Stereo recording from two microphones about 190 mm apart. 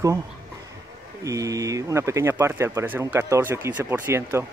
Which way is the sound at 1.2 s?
15° right (ahead or behind).